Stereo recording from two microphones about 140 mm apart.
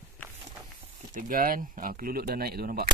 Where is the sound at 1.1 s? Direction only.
80° right.